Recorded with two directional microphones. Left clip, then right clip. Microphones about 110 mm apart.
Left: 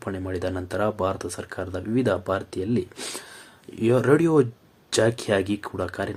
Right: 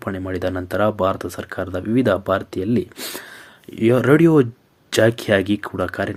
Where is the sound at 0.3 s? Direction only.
25° right (ahead or behind).